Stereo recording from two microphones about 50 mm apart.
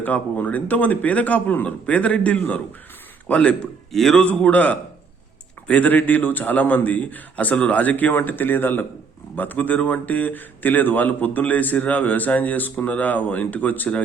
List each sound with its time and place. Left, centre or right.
0.0 s a man's voice: left
3.9 s speech: centre
4.2 s a man's voice: left